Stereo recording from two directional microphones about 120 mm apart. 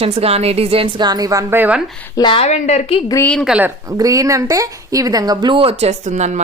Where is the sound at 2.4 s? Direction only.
75° left (ahead or behind).